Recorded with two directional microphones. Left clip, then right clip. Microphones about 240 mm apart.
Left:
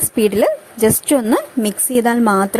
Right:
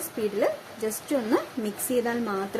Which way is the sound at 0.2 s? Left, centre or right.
Left.